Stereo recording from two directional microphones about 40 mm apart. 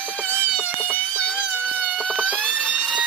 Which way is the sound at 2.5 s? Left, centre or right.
Right.